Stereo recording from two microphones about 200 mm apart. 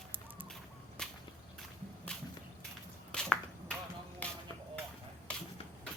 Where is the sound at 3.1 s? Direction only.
5° left (ahead or behind).